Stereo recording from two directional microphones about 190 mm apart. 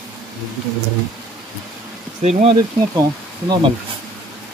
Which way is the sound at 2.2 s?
35° right (ahead or behind).